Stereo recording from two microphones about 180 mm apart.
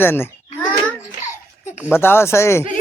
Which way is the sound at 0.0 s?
10° left (ahead or behind).